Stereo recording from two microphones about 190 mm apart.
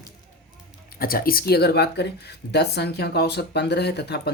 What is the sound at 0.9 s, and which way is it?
Speech, 50° left (ahead or behind).